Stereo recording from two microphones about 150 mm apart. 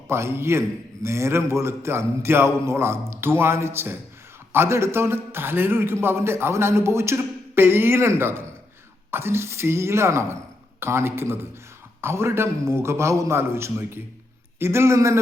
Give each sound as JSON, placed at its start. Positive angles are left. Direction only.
{"t": 0.1, "sound": "a man's voice", "side_deg": -15}